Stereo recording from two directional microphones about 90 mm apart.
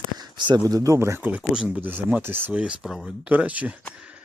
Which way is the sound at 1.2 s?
20° right (ahead or behind).